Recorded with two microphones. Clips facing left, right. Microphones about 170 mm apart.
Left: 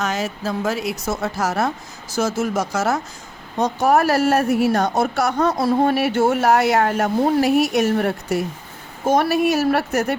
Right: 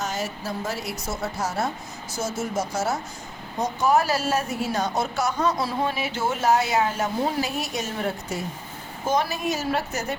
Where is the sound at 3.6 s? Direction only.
65° left (ahead or behind).